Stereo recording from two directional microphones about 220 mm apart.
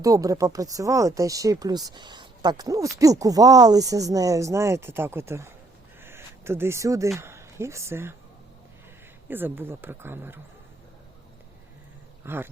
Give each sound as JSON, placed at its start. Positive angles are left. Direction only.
{"t": 0.0, "sound": "speech", "side_deg": -15}
{"t": 9.3, "sound": "speech", "side_deg": -10}
{"t": 12.2, "sound": "speech", "side_deg": -10}